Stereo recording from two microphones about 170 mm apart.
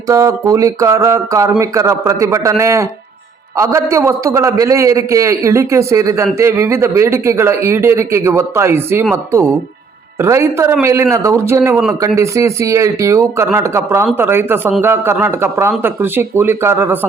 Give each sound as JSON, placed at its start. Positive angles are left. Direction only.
{"t": 0.1, "sound": "speech", "side_deg": -20}